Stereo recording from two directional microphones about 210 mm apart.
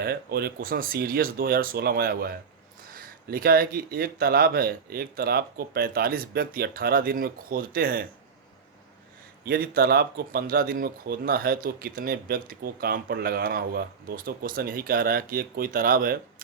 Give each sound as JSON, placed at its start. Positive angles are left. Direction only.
{"t": 0.0, "sound": "speech", "side_deg": -50}
{"t": 9.4, "sound": "speech", "side_deg": -45}